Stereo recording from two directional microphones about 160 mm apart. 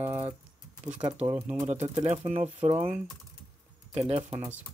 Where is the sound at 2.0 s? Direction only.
45° right (ahead or behind).